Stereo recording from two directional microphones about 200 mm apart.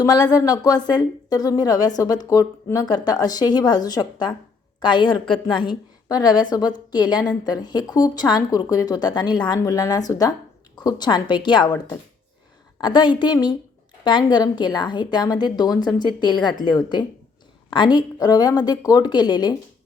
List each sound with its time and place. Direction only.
0.0 s a woman's voice: 20° left (ahead or behind)
12.8 s a woman's voice: 20° left (ahead or behind)